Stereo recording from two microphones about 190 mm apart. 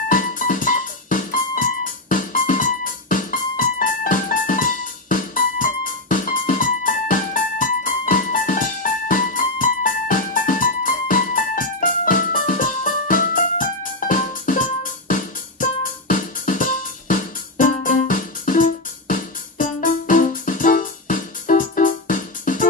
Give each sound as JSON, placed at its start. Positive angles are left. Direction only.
{"t": 0.1, "sound": "music", "side_deg": 45}